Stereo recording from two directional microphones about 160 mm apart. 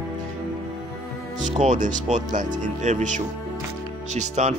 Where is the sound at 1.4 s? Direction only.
50° right (ahead or behind).